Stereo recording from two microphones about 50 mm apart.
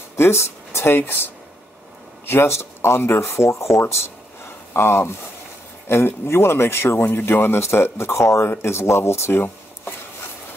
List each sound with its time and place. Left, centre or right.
0.1 s speech: left
1.0 s speech: left
2.2 s speech: left
4.7 s speech: left